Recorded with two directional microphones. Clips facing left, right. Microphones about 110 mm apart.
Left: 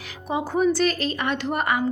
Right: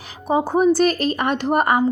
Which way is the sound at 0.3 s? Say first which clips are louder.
Right 5 dB; 35° right (ahead or behind).